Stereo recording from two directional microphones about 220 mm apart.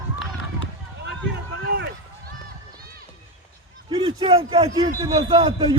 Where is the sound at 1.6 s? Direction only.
45° right (ahead or behind).